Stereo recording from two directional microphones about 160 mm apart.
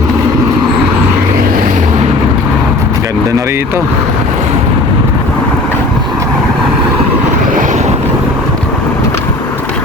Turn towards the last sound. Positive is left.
turn(degrees=-50)  # may be behind; listen again after turning